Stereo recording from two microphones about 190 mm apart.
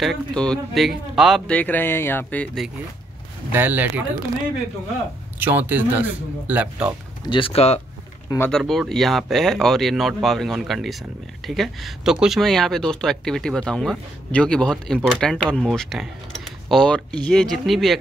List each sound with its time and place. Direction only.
0.0 s speech: centre (ahead or behind)
3.5 s speech: 10° right (ahead or behind)
5.4 s speech: 10° right (ahead or behind)
7.2 s speech: 25° left (ahead or behind)
8.5 s speech: 5° left (ahead or behind)